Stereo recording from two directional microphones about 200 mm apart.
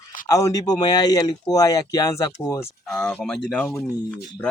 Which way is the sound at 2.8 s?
5° left (ahead or behind).